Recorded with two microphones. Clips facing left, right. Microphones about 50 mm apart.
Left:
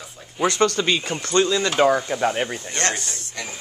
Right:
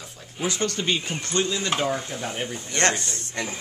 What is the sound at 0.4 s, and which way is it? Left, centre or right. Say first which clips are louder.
Speech: left 7 dB; left.